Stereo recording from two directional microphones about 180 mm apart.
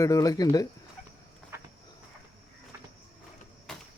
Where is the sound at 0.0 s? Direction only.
20° left (ahead or behind).